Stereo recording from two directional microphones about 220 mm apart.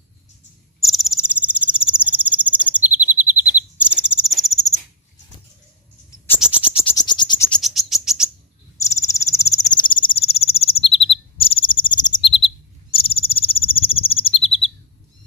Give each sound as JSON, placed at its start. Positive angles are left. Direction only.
{"t": 0.7, "sound": "cricket", "side_deg": 0}
{"t": 3.2, "sound": "bird", "side_deg": -10}
{"t": 6.9, "sound": "frog", "side_deg": 20}
{"t": 7.5, "sound": "frog", "side_deg": 0}
{"t": 8.7, "sound": "cricket", "side_deg": 15}
{"t": 12.3, "sound": "bird", "side_deg": 25}